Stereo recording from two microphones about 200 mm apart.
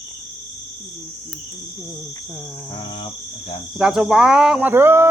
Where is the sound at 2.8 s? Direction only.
30° left (ahead or behind).